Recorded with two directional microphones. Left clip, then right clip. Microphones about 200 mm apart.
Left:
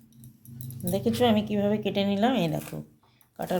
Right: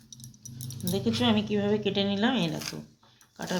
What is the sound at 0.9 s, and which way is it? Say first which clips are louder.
Speech: left 3 dB; 65° left (ahead or behind).